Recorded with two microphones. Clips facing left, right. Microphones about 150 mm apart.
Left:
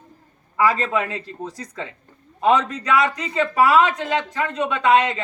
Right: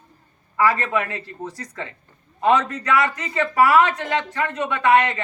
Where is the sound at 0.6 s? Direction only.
15° left (ahead or behind).